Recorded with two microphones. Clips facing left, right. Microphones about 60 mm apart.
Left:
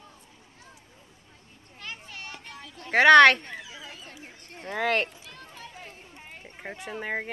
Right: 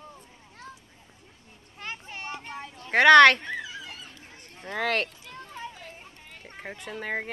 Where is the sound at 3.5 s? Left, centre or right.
Right.